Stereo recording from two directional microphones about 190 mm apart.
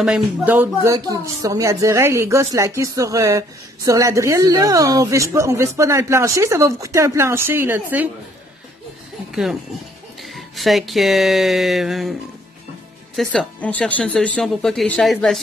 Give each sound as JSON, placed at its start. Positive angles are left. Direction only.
{"t": 0.0, "sound": "speech", "side_deg": -5}
{"t": 9.3, "sound": "speech", "side_deg": 0}